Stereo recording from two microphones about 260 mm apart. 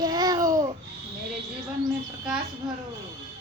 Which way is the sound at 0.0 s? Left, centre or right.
Centre.